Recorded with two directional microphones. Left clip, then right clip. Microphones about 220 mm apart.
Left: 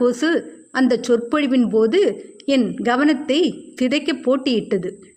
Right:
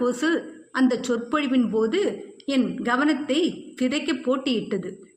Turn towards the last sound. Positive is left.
turn(degrees=45)  # may be behind; listen again after turning